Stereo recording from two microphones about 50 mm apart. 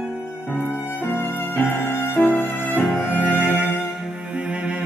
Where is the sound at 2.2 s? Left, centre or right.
Centre.